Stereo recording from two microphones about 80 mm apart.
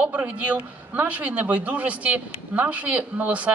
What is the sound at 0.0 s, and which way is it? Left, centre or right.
A man's voice, centre.